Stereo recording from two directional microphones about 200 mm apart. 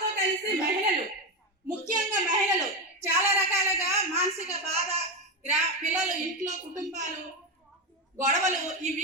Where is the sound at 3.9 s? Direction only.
30° right (ahead or behind).